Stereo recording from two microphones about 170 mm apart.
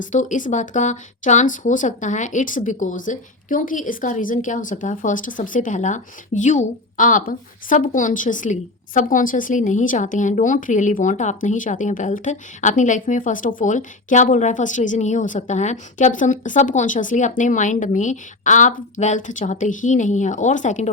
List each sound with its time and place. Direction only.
0.0 s a woman's voice: 45° left (ahead or behind)